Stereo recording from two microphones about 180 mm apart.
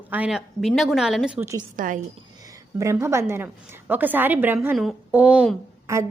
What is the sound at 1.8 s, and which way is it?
Speech, 45° right (ahead or behind).